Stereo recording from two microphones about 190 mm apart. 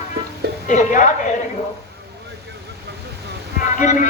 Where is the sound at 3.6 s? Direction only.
45° left (ahead or behind).